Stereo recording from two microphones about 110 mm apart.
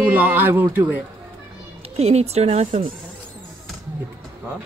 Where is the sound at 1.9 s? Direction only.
75° right (ahead or behind).